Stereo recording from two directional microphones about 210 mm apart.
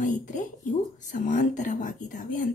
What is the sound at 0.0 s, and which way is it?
Speech, 35° left (ahead or behind).